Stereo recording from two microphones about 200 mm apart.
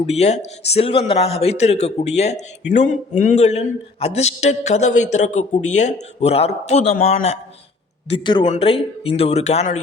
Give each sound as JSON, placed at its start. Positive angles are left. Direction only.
{"t": 0.1, "sound": "a man's voice", "side_deg": 30}
{"t": 8.1, "sound": "a man's voice", "side_deg": 25}